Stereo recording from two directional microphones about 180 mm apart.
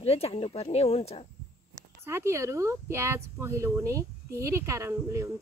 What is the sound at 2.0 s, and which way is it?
Speech, 15° right (ahead or behind).